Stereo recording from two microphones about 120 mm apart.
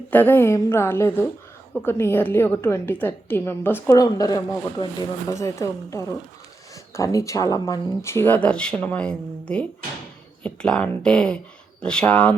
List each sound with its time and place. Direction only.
0.1 s a woman's voice: 15° left (ahead or behind)
3.9 s a woman's voice: 30° left (ahead or behind); by 12.3 s 10° left (ahead or behind)